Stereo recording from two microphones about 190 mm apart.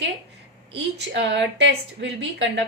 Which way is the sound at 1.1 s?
70° right (ahead or behind).